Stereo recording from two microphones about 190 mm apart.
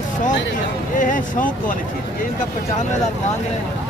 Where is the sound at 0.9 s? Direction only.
40° left (ahead or behind).